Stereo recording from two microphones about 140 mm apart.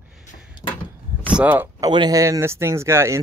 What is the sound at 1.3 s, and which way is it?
Speech, 10° right (ahead or behind).